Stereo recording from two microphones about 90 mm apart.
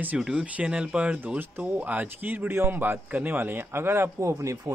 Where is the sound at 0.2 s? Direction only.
10° right (ahead or behind).